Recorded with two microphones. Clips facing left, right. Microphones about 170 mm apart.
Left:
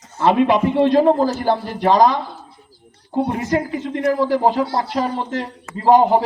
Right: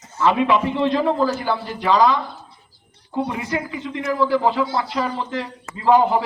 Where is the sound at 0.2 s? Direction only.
50° left (ahead or behind).